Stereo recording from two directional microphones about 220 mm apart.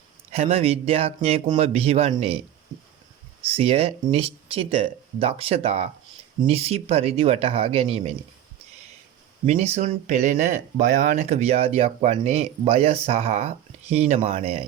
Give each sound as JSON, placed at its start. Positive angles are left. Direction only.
{"t": 0.3, "sound": "speech", "side_deg": -30}
{"t": 3.4, "sound": "speech", "side_deg": -25}
{"t": 9.5, "sound": "speech", "side_deg": -30}